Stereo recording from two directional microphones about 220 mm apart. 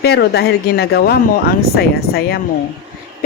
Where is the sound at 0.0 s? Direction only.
50° left (ahead or behind).